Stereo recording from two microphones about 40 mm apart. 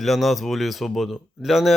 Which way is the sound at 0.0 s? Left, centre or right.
Centre.